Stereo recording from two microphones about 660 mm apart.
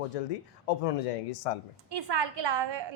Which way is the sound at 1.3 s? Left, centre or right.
Left.